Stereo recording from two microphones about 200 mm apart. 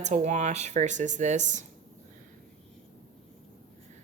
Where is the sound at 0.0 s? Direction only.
35° right (ahead or behind).